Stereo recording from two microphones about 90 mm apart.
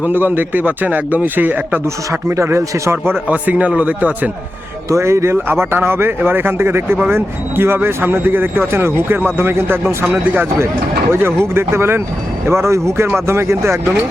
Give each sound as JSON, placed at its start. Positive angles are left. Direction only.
{"t": 0.0, "sound": "speech", "side_deg": -20}
{"t": 4.9, "sound": "speech", "side_deg": -30}